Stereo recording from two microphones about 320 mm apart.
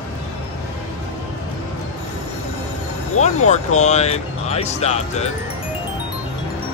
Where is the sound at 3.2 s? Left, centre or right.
Left.